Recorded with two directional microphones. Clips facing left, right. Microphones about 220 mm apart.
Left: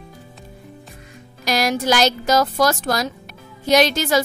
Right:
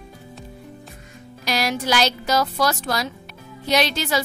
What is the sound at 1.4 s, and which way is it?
A woman's voice, 45° left (ahead or behind).